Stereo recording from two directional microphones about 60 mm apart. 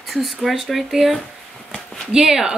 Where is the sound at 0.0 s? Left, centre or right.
Centre.